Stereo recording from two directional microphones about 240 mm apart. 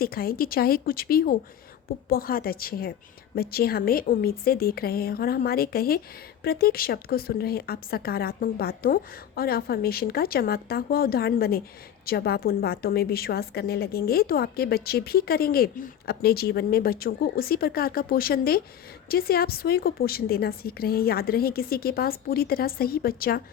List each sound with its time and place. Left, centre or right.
0.0 s a woman's voice: left